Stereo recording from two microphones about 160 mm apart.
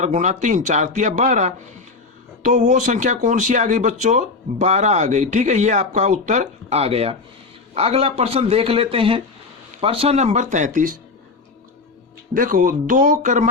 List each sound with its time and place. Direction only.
0.0 s speech: 50° right (ahead or behind)
12.3 s speech: 60° right (ahead or behind)